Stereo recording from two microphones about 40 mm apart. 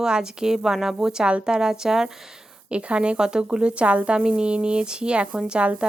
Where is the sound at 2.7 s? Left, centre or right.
Right.